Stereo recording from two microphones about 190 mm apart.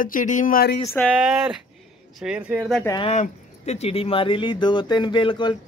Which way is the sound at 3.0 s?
35° left (ahead or behind).